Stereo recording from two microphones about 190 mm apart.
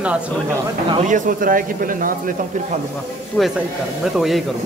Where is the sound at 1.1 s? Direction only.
45° right (ahead or behind).